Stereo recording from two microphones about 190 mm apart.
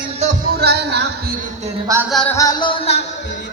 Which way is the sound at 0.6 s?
60° right (ahead or behind).